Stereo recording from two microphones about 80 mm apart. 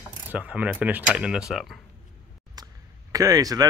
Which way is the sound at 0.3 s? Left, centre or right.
Centre.